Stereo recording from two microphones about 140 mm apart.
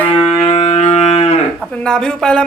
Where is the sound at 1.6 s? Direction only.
5° left (ahead or behind).